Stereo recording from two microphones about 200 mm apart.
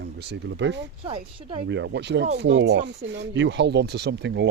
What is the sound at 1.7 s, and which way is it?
Speech, 65° right (ahead or behind).